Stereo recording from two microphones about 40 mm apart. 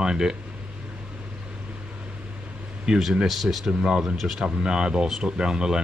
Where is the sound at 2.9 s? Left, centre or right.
Centre.